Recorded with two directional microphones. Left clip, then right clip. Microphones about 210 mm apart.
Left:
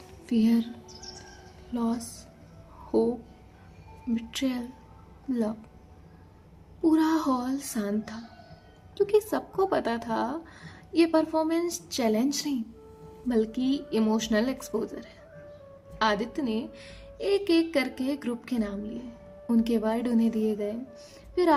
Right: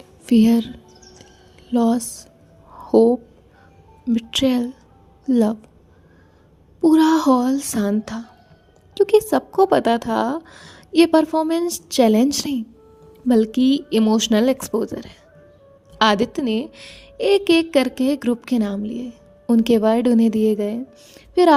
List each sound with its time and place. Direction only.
0.3 s a woman's voice: 45° right (ahead or behind)
1.7 s a woman's voice: 45° right (ahead or behind)
4.1 s a woman's voice: 45° right (ahead or behind)
6.8 s a woman's voice: 45° right (ahead or behind)